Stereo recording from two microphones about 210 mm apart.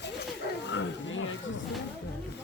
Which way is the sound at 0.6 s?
60° left (ahead or behind).